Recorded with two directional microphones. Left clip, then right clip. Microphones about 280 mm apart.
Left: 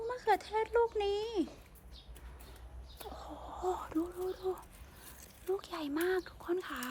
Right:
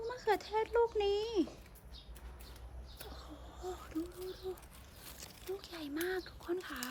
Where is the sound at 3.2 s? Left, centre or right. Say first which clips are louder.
Left 8 dB; centre.